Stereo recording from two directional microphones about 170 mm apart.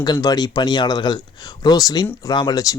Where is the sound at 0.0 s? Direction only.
25° left (ahead or behind).